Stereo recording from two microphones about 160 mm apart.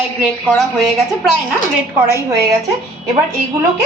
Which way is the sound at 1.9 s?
15° right (ahead or behind).